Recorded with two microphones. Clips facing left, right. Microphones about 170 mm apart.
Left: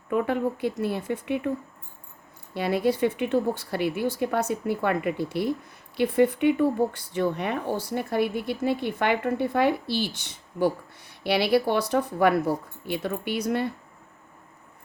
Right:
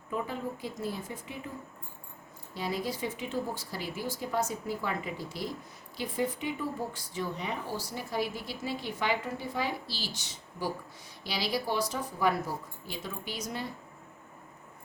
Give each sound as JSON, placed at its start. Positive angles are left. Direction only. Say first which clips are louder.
{"t": 0.1, "sound": "a woman's voice", "louder": "left 10 dB", "side_deg": 65}
{"t": 2.6, "sound": "speech", "louder": "left 10 dB", "side_deg": 65}